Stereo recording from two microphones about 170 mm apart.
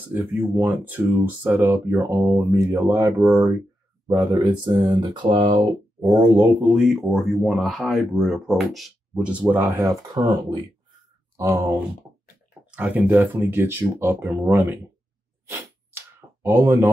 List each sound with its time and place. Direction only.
0.1 s speech: 10° right (ahead or behind)
6.7 s speech: centre (ahead or behind)
9.6 s speech: 20° right (ahead or behind)
11.3 s speech: 15° right (ahead or behind)
15.4 s a sound: 15° right (ahead or behind)
16.4 s speech: 15° right (ahead or behind)